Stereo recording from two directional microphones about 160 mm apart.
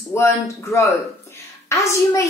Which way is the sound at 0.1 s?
15° left (ahead or behind).